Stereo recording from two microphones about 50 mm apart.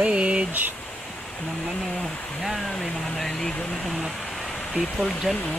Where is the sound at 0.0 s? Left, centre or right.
Right.